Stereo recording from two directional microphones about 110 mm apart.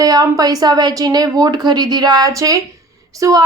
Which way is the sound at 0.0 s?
35° right (ahead or behind).